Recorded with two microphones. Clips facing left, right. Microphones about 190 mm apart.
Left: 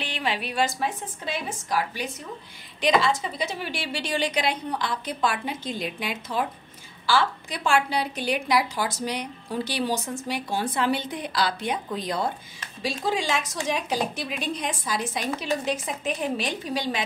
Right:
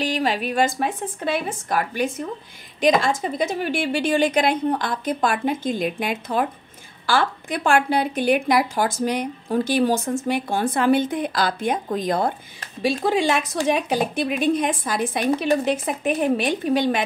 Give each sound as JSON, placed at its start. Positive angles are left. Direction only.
{"t": 0.0, "sound": "a woman's voice", "side_deg": -40}